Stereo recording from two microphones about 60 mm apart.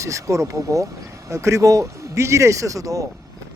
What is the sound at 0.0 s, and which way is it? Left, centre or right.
A man's voice, right.